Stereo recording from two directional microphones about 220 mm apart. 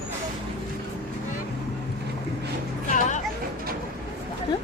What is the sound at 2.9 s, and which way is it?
Speech, 35° left (ahead or behind).